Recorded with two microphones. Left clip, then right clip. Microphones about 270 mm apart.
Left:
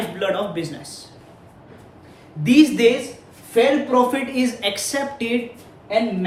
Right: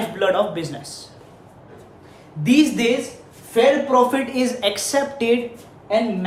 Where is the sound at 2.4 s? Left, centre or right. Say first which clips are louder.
Left 3 dB; centre.